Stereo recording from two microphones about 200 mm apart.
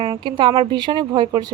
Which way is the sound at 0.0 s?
25° right (ahead or behind).